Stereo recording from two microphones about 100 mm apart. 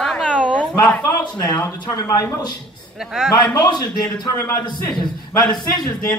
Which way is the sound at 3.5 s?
45° left (ahead or behind).